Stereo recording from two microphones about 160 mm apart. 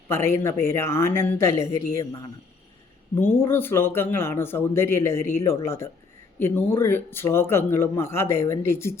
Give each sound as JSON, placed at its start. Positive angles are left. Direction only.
{"t": 0.1, "sound": "a man's voice", "side_deg": 15}